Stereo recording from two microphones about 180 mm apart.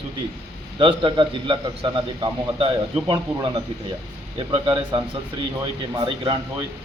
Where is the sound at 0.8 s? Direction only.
25° right (ahead or behind).